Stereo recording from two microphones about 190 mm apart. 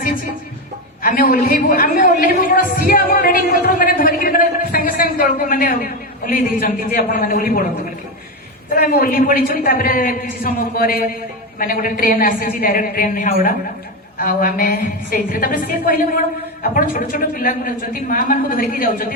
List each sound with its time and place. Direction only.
1.0 s a woman's voice: 50° left (ahead or behind)
8.7 s a man's voice: 50° left (ahead or behind)